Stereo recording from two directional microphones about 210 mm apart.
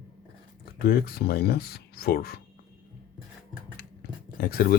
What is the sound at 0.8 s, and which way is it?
Speech, 45° left (ahead or behind).